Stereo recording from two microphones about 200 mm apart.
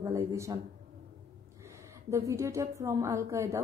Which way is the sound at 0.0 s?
15° right (ahead or behind).